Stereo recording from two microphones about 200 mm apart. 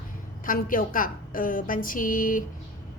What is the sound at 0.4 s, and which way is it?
A woman's voice, 45° left (ahead or behind).